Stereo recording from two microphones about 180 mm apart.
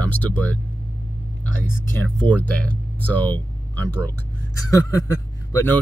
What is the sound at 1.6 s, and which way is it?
Speech, 10° left (ahead or behind).